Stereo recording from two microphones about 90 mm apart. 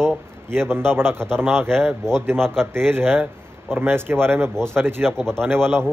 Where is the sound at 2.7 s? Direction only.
25° right (ahead or behind).